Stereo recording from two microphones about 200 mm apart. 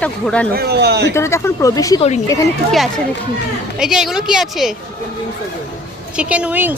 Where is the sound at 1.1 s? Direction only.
15° left (ahead or behind).